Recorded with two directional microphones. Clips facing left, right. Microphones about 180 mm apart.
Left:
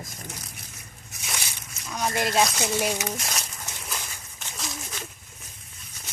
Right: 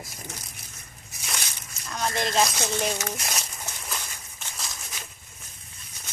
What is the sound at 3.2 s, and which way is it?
Speech, 5° right (ahead or behind).